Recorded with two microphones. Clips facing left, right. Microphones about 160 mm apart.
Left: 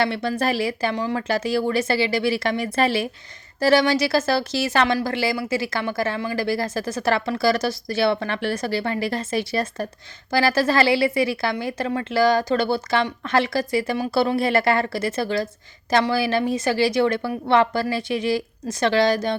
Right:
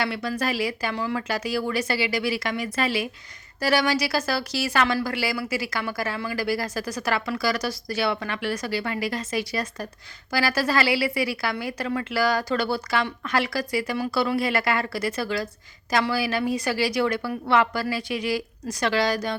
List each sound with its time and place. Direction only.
0.0 s speech: 30° left (ahead or behind)